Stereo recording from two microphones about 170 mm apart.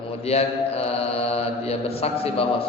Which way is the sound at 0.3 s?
35° left (ahead or behind).